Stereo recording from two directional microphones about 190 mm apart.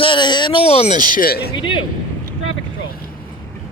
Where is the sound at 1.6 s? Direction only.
25° left (ahead or behind).